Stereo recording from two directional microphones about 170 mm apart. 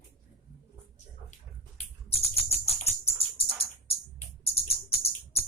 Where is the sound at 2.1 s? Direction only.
35° left (ahead or behind).